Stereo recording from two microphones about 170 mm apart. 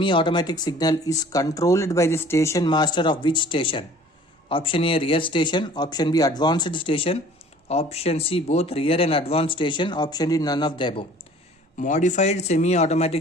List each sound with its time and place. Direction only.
0.0 s speech: 30° left (ahead or behind)
11.8 s speech: 45° left (ahead or behind)